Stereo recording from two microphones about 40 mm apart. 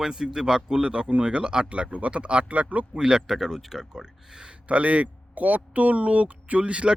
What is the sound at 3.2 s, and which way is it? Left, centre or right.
Speech, centre.